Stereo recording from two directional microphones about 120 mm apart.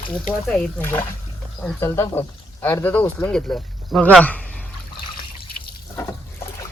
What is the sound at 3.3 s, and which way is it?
Speech, 5° left (ahead or behind).